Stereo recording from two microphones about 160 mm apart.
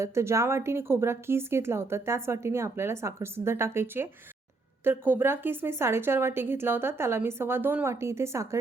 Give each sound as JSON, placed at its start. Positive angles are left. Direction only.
{"t": 0.0, "sound": "speech", "side_deg": -15}